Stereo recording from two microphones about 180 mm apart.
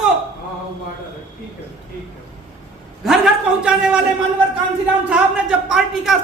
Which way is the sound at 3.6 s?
5° right (ahead or behind).